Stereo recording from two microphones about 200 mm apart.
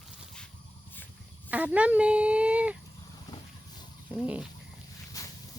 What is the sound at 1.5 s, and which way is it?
Speech, 5° right (ahead or behind).